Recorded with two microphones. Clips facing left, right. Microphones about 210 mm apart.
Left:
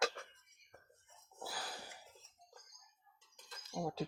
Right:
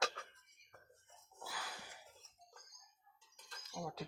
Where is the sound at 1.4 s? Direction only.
35° left (ahead or behind).